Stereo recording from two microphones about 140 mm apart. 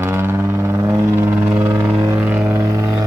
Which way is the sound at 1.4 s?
15° right (ahead or behind).